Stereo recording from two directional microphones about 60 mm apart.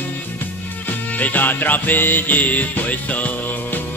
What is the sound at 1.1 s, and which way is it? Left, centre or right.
Music, left.